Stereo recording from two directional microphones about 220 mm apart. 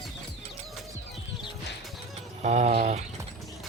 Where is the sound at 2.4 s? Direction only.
30° right (ahead or behind).